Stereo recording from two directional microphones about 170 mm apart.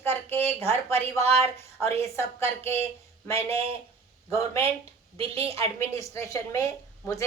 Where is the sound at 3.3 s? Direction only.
35° right (ahead or behind).